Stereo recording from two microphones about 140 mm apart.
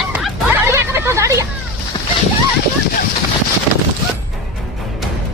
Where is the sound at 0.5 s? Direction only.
20° right (ahead or behind).